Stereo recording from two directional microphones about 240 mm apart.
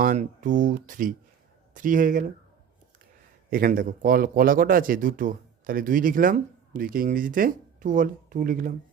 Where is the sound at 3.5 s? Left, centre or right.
Right.